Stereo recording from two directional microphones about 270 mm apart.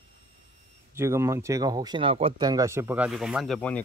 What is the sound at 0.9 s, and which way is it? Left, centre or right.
Speech, centre.